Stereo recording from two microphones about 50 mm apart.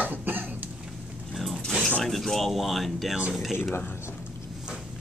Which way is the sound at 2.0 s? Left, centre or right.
Centre.